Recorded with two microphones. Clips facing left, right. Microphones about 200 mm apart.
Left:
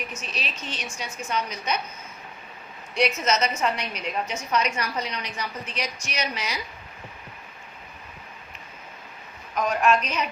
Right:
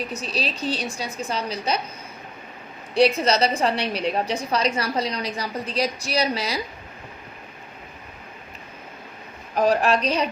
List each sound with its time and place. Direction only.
0.0 s a woman's voice: 35° right (ahead or behind)
2.9 s a woman's voice: 30° right (ahead or behind)
9.6 s a woman's voice: 35° right (ahead or behind)